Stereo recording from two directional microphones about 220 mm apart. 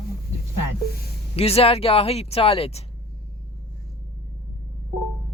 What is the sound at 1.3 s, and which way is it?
Speech, 25° left (ahead or behind).